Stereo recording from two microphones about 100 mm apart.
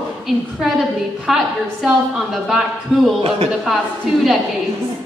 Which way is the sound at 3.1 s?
75° right (ahead or behind).